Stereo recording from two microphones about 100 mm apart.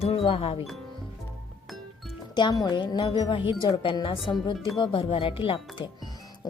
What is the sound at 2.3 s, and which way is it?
Speech, 45° left (ahead or behind).